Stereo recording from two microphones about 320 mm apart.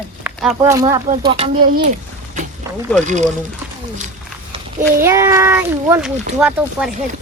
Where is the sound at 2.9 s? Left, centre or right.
Right.